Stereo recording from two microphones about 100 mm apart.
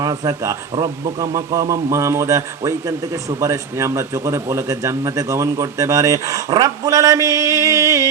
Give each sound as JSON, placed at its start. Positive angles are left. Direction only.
{"t": 0.0, "sound": "a man's voice", "side_deg": -40}